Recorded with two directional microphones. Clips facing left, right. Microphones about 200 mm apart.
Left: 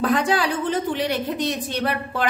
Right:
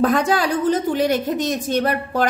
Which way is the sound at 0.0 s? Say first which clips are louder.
Right 3 dB; 45° right (ahead or behind).